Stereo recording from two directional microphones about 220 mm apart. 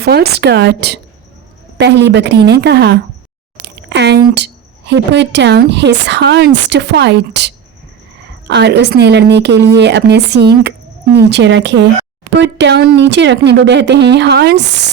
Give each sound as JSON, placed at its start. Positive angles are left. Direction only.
{"t": 0.0, "sound": "speech", "side_deg": -45}
{"t": 3.8, "sound": "a sound", "side_deg": -50}
{"t": 4.4, "sound": "speech", "side_deg": -50}